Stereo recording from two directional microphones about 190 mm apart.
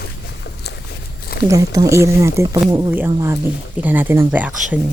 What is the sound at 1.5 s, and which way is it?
Speech, 15° right (ahead or behind).